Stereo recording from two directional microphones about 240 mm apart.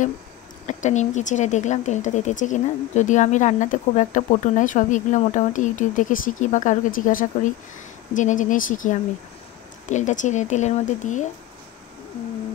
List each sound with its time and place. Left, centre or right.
0.7 s speech: left